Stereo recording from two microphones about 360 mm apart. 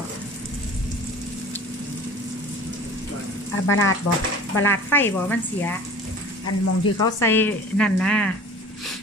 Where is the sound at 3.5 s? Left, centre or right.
Left.